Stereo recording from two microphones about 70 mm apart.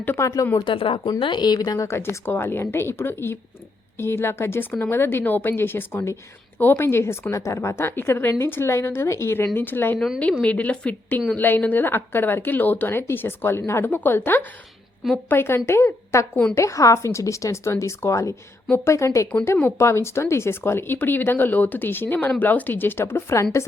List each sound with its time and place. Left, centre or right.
0.2 s a woman's voice: left
1.0 s a woman's voice: left
1.9 s a woman's voice: left
16.3 s a woman's voice: centre
16.6 s a woman's voice: left